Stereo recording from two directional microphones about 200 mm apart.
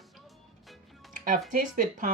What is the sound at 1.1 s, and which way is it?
Music, 45° right (ahead or behind).